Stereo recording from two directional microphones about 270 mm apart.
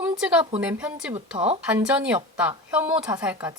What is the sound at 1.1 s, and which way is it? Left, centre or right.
Speech, right.